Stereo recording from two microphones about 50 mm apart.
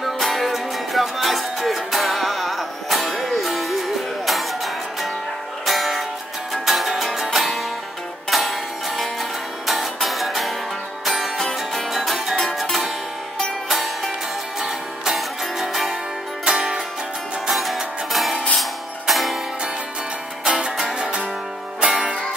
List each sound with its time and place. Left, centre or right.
0.0 s music: centre
5.7 s music: centre
11.3 s music: centre
13.7 s music: centre
16.4 s music: centre
17.5 s music: centre
20.4 s music: centre